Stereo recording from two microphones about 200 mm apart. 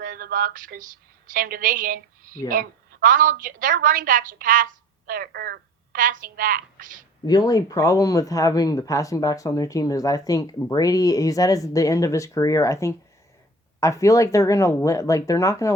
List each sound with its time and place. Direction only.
0.0 s a woman's voice: 45° right (ahead or behind)
7.3 s speech: 20° left (ahead or behind)